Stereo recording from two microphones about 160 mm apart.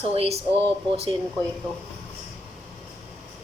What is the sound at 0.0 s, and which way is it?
Speech, 40° right (ahead or behind).